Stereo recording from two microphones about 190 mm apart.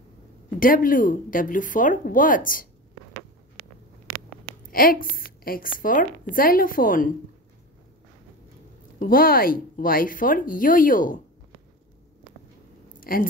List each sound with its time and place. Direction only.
0.6 s speech: 45° left (ahead or behind)
5.1 s speech: 50° left (ahead or behind)
9.0 s speech: 50° left (ahead or behind)
13.0 s speech: 50° left (ahead or behind)